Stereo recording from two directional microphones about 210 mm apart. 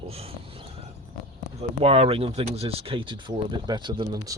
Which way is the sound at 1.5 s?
30° right (ahead or behind).